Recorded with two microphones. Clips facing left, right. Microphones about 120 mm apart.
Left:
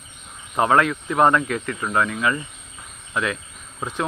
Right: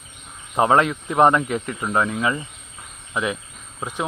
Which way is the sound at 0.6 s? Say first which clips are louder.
Right 1 dB; 25° right (ahead or behind).